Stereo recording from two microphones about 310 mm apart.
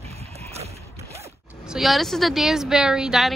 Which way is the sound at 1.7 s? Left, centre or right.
Centre.